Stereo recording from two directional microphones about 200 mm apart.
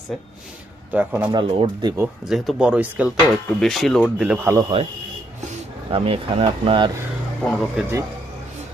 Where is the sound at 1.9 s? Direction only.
5° right (ahead or behind).